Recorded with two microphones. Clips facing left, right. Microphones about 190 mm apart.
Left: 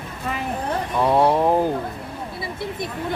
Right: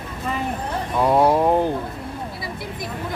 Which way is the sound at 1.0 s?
5° right (ahead or behind).